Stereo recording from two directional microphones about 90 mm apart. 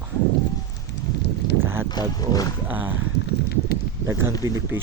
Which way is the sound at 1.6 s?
25° right (ahead or behind).